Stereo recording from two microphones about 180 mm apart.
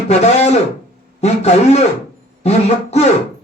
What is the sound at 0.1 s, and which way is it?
Speech, 35° left (ahead or behind).